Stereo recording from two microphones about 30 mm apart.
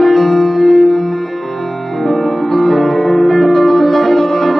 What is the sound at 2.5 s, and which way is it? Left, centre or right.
Music, centre.